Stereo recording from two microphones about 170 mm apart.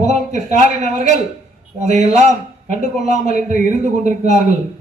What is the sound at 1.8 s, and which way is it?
A man's voice, 40° right (ahead or behind).